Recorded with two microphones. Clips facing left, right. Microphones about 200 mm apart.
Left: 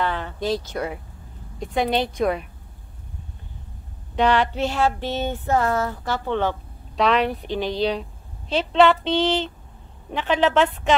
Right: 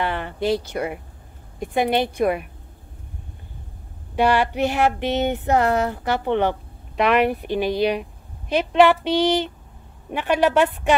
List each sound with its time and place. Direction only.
0.0 s a sound: 10° right (ahead or behind)
0.4 s speech: 60° right (ahead or behind)
0.7 s a woman's voice: 10° right (ahead or behind)
4.1 s a woman's voice: 10° right (ahead or behind)
5.4 s speech: 70° right (ahead or behind)
5.8 s a woman's voice: 15° right (ahead or behind)